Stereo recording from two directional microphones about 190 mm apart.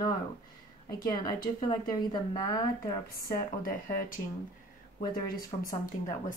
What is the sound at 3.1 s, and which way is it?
Speech, 50° left (ahead or behind).